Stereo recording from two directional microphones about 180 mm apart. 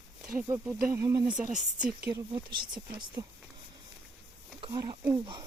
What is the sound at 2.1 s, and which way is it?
Speech, 25° right (ahead or behind).